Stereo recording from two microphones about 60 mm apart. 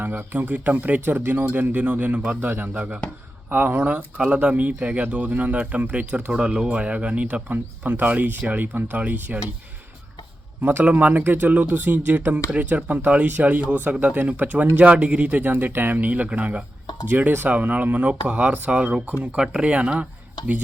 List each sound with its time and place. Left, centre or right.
0.0 s a man's voice: right
10.6 s a man's voice: right
19.4 s a man's voice: centre